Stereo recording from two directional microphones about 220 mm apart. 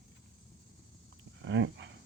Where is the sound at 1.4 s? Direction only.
55° right (ahead or behind).